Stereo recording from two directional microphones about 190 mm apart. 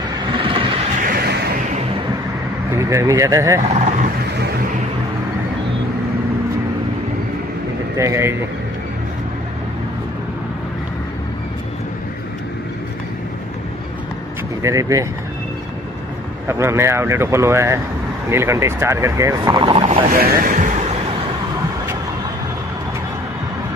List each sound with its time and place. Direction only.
0.3 s vehicle: 25° right (ahead or behind)
1.0 s a sound: 55° right (ahead or behind)
2.7 s speech: 15° right (ahead or behind)
8.0 s speech: 15° right (ahead or behind)
14.6 s speech: 15° right (ahead or behind)
16.4 s speech: 15° right (ahead or behind)
20.1 s speech: 50° right (ahead or behind)
20.5 s vehicle: 40° right (ahead or behind)